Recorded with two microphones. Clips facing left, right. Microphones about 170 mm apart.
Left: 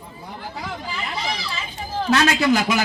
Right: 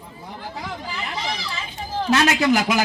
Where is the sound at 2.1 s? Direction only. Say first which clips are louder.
Even; 20° right (ahead or behind).